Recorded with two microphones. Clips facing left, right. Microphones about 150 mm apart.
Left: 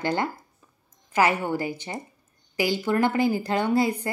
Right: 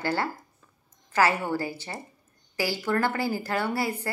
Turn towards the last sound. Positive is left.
turn(degrees=20)  # may be behind; listen again after turning